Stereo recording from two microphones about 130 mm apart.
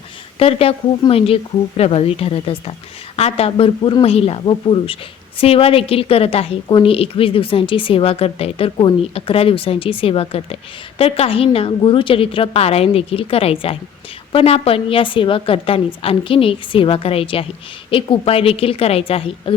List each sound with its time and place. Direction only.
0.3 s a woman's voice: 45° left (ahead or behind)